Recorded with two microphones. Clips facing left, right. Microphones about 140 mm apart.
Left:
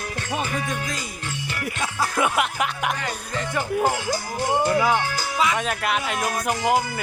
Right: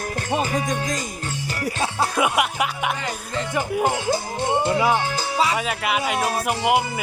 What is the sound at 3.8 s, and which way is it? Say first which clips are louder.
Speech: right 2 dB; 25° right (ahead or behind).